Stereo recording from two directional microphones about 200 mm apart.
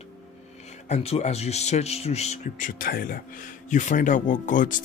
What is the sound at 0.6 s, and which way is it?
Speech, 35° left (ahead or behind).